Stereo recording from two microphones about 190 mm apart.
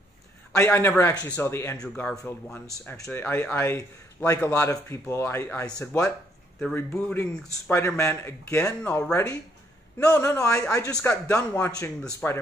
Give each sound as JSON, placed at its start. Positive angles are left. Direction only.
{"t": 0.6, "sound": "speech", "side_deg": 10}